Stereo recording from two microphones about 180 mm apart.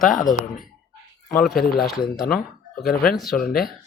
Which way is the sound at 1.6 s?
55° left (ahead or behind).